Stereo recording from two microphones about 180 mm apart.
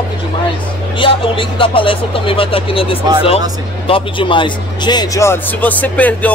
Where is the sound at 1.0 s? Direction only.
30° left (ahead or behind).